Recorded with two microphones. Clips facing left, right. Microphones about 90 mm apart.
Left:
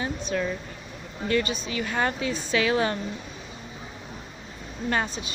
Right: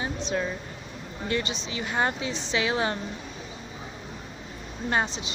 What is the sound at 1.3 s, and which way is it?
Speech, 20° right (ahead or behind).